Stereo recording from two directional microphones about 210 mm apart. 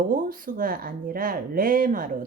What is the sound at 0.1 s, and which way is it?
Speech, 40° right (ahead or behind).